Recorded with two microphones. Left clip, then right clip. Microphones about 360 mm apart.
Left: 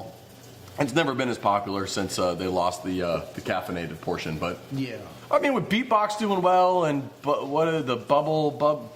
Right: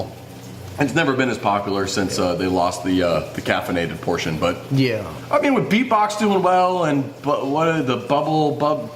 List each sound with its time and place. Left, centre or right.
0.8 s speech: left
5.3 s speech: left